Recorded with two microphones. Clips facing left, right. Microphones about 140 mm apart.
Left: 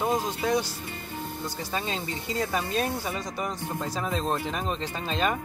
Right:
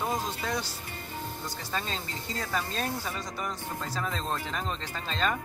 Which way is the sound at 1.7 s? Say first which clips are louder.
Left 3 dB; 15° left (ahead or behind).